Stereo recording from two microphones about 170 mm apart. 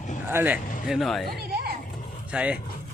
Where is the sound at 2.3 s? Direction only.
5° right (ahead or behind).